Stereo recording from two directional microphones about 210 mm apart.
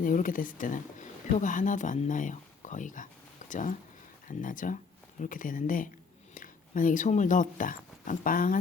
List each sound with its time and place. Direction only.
0.0 s speech: 40° left (ahead or behind)